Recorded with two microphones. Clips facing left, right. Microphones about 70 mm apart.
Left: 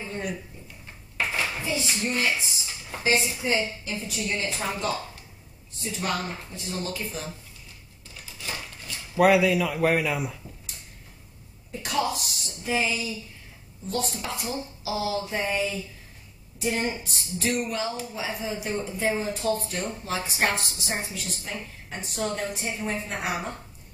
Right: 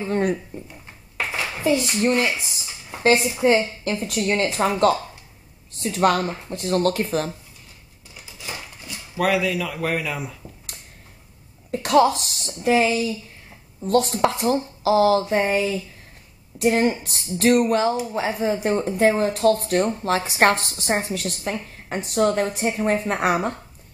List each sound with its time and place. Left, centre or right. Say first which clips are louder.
0.1 s a sound: right 12 dB; right
1.6 s speech: right 9 dB; right
3.0 s speech: right 7 dB; right
9.1 s speech: left 2 dB; centre
11.7 s speech: right 10 dB; right
20.5 s speech: right 7 dB; right